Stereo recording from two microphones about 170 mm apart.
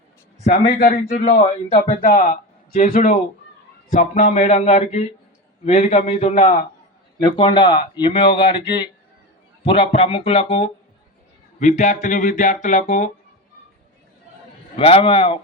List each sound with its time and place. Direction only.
0.8 s speech: 50° left (ahead or behind)
2.0 s speech: 55° left (ahead or behind)
7.2 s speech: 30° left (ahead or behind); by 13.1 s 45° left (ahead or behind)
14.8 s speech: 35° left (ahead or behind)